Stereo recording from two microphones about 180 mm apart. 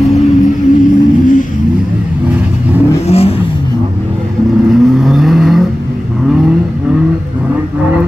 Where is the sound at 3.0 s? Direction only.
35° left (ahead or behind).